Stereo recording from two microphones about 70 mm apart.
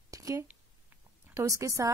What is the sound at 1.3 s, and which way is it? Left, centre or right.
Speech, right.